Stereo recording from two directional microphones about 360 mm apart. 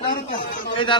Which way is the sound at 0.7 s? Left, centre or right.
Centre.